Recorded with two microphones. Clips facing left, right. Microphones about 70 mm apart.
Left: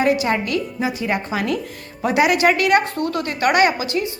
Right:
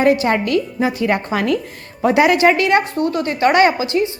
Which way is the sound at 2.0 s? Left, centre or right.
Right.